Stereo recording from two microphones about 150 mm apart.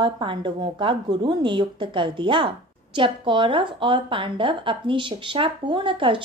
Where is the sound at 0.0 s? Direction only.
35° right (ahead or behind).